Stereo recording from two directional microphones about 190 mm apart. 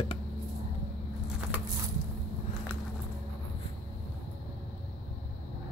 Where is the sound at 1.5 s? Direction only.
10° right (ahead or behind).